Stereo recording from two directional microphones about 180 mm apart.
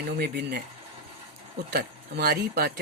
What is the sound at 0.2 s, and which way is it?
Speech, 65° right (ahead or behind).